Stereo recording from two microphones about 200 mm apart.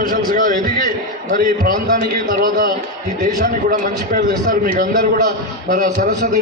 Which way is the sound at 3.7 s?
40° right (ahead or behind).